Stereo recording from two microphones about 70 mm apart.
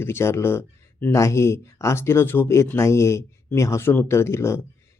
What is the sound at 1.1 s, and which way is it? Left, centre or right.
Speech, left.